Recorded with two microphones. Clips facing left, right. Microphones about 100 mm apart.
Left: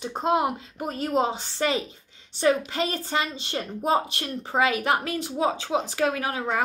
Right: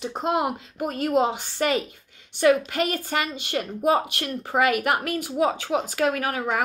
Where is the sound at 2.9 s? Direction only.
25° left (ahead or behind).